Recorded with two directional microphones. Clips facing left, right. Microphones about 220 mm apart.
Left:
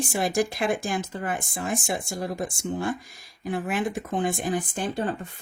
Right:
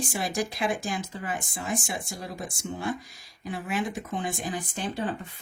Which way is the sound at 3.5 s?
55° left (ahead or behind).